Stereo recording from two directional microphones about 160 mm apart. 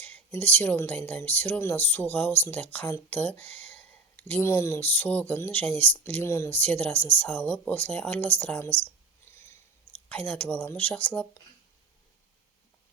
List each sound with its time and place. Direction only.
0.0 s speech: 10° left (ahead or behind)
9.3 s a sound: 15° left (ahead or behind)
10.1 s speech: 10° left (ahead or behind)